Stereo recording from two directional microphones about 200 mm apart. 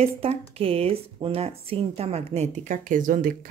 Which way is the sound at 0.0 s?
30° right (ahead or behind).